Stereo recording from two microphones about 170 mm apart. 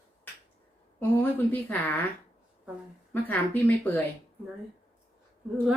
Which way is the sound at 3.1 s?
10° left (ahead or behind).